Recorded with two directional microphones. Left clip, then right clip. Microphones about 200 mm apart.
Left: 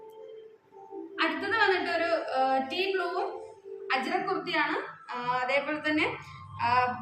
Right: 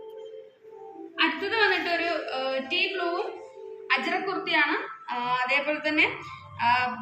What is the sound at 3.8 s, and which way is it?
Speech, 25° left (ahead or behind).